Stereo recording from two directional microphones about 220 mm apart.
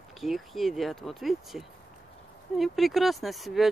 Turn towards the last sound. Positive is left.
turn(degrees=0)  # may be behind; listen again after turning